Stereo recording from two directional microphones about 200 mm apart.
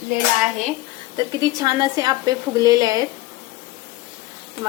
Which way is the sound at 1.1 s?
20° right (ahead or behind).